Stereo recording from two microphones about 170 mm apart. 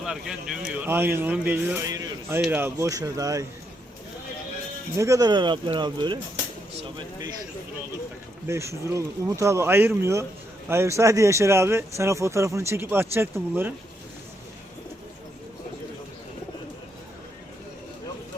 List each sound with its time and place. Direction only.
0.0 s speech: 5° right (ahead or behind); by 3.4 s 20° right (ahead or behind)
4.9 s speech: 20° right (ahead or behind)
8.4 s speech: 15° right (ahead or behind)